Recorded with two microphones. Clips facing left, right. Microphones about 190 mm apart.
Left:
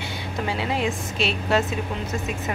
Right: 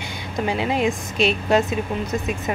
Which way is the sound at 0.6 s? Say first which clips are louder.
Right 4 dB; 15° right (ahead or behind).